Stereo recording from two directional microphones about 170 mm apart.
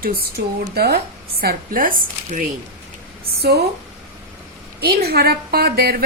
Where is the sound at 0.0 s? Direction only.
65° right (ahead or behind).